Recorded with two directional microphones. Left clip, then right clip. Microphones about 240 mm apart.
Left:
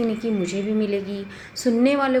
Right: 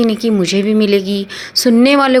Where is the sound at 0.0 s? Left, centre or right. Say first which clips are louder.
Right 10 dB; right.